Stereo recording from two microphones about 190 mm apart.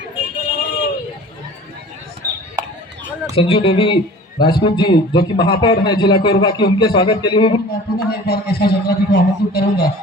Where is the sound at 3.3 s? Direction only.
30° left (ahead or behind).